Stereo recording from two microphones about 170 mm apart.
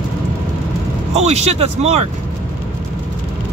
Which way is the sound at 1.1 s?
40° right (ahead or behind).